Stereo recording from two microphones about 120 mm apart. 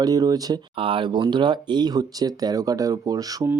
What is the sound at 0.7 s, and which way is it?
Speech, 45° right (ahead or behind).